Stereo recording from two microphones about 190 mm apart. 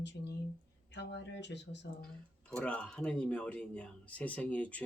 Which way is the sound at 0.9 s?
65° left (ahead or behind).